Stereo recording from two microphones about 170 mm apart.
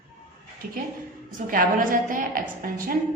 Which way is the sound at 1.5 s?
55° right (ahead or behind).